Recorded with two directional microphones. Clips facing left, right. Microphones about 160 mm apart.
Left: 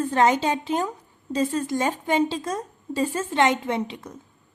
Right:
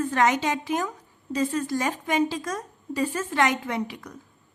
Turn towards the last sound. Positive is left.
turn(degrees=25)  # may be behind; listen again after turning